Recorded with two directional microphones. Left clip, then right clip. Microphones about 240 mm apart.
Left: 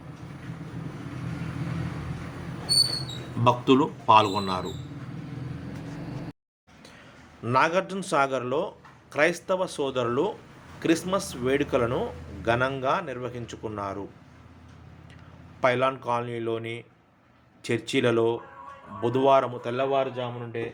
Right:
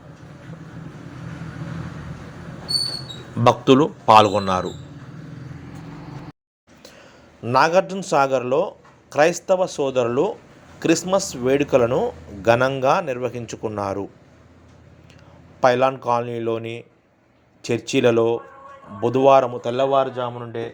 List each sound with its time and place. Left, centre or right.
3.4 s speech: right
7.4 s a man's voice: centre
15.6 s a man's voice: centre